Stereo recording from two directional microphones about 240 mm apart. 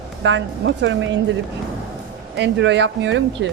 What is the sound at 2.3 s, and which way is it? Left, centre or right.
Speech, right.